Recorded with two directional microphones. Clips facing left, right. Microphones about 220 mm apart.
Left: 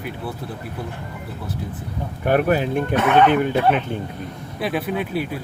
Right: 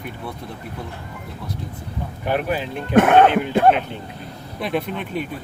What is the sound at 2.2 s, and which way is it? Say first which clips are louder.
Speech: left 5 dB; 50° left (ahead or behind).